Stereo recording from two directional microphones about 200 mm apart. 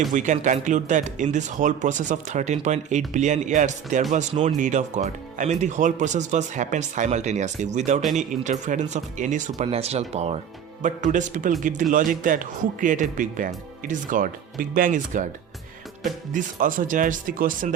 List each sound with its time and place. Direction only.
0.1 s speech: 40° right (ahead or behind)
16.3 s speech: 40° right (ahead or behind)